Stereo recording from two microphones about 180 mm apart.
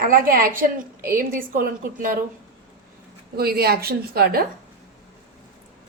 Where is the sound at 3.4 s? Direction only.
60° right (ahead or behind).